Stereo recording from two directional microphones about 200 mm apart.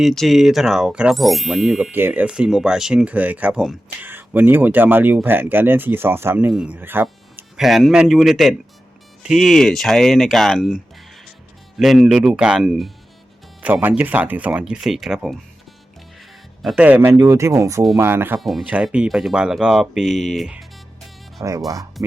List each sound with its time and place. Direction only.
0.0 s speech: centre (ahead or behind)
11.8 s speech: centre (ahead or behind)
16.6 s speech: 5° right (ahead or behind)
18.3 s speech: centre (ahead or behind)
21.4 s speech: 15° right (ahead or behind)